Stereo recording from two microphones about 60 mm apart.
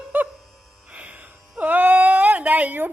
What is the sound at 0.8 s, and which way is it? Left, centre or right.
Music, right.